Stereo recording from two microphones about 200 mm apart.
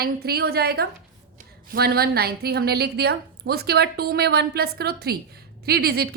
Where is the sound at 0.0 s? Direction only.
50° right (ahead or behind).